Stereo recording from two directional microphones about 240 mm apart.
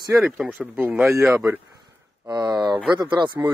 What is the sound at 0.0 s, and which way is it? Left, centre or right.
Speech, centre.